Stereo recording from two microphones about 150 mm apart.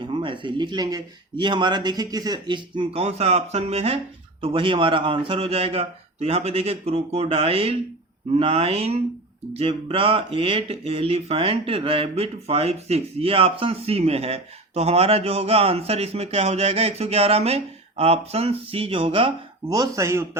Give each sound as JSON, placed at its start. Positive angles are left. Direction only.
{"t": 0.0, "sound": "speech", "side_deg": -35}
{"t": 19.7, "sound": "speech", "side_deg": -25}